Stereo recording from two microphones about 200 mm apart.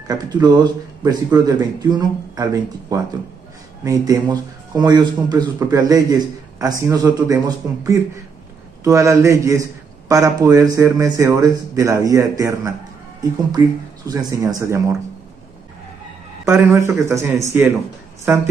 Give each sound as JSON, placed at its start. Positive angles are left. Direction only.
{"t": 0.1, "sound": "a man's voice", "side_deg": -20}
{"t": 14.0, "sound": "a man's voice", "side_deg": -15}
{"t": 16.4, "sound": "a man's voice", "side_deg": -15}